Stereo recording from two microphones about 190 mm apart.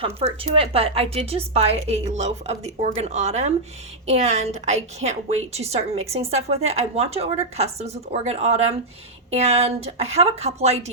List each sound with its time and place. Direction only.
0.4 s a woman's voice: 30° right (ahead or behind)